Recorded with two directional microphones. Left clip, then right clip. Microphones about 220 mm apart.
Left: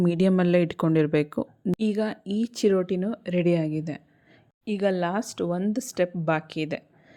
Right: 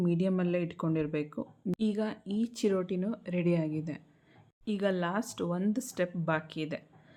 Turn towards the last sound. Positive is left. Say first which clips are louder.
# left 6 dB
turn(degrees=25)  # may be behind; listen again after turning